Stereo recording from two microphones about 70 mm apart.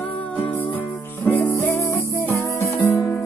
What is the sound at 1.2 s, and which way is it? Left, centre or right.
Music, left.